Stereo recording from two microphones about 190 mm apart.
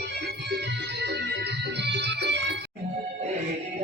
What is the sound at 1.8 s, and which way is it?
Music, 65° right (ahead or behind).